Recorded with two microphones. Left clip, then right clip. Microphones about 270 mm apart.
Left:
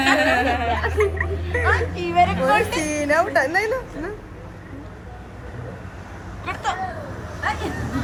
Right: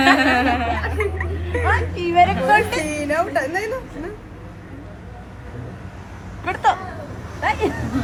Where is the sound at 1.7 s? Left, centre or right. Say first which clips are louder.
Right 4 dB; right.